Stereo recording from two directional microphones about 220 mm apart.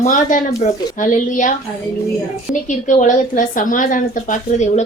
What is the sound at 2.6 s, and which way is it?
A woman's voice, 35° left (ahead or behind).